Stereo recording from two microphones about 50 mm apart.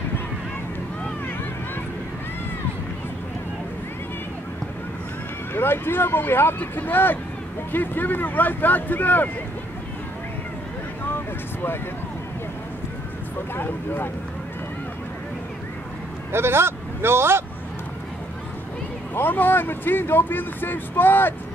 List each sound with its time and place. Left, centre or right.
5.5 s speech: left
13.6 s speech: left
16.3 s speech: right
19.1 s speech: left